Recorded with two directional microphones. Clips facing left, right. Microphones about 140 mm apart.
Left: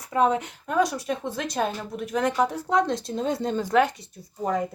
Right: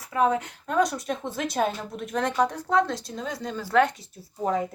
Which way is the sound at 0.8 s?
Centre (ahead or behind).